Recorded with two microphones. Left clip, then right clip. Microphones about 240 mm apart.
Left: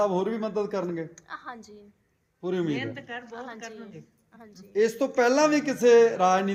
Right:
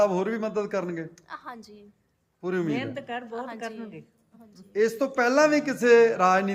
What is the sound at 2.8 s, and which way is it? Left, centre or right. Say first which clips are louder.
A woman's voice: right 2 dB; right.